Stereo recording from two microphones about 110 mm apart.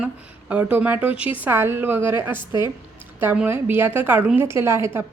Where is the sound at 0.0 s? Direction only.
10° right (ahead or behind).